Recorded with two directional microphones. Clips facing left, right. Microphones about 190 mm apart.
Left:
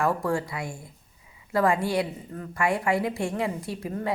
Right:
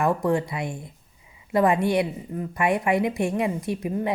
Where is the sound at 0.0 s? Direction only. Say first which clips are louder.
Right 3 dB; 20° right (ahead or behind).